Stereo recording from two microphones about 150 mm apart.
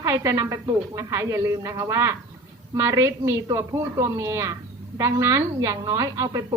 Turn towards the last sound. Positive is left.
turn(degrees=-20)  # may be behind; listen again after turning